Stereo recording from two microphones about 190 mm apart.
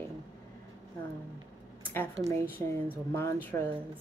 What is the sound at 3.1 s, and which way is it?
Speech, 15° left (ahead or behind).